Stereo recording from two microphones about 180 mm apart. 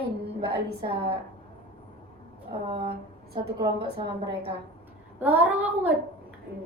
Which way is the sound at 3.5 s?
25° right (ahead or behind).